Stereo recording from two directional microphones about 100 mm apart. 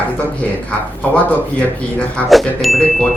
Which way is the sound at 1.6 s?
15° left (ahead or behind).